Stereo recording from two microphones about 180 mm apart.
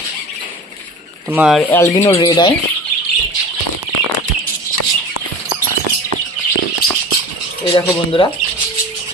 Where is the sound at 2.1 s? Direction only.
25° left (ahead or behind).